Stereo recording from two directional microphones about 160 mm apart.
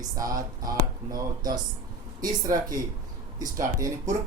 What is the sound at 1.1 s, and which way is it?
Speech, 25° right (ahead or behind).